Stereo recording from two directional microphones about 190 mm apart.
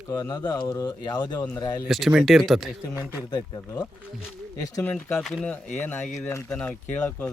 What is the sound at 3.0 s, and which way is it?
Speech, 10° right (ahead or behind).